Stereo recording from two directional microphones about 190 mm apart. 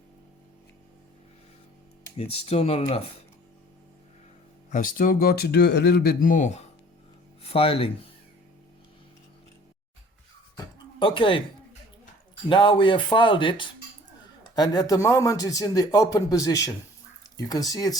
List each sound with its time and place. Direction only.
2.1 s speech: 30° left (ahead or behind)
4.7 s speech: 45° left (ahead or behind); by 8.1 s 30° left (ahead or behind)
11.0 s speech: 25° left (ahead or behind)
12.5 s a man's voice: 25° left (ahead or behind)